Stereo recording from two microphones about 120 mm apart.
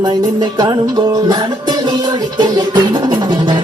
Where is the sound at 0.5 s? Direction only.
35° right (ahead or behind).